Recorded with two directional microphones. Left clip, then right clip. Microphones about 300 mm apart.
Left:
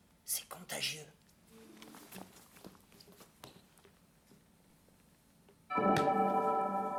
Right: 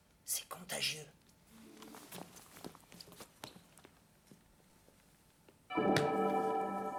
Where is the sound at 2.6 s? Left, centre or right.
Right.